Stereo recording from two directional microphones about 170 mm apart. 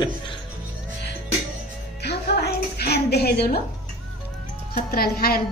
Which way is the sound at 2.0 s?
70° left (ahead or behind).